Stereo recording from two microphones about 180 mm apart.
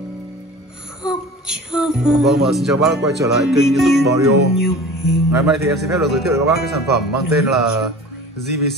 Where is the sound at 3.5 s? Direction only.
Centre (ahead or behind).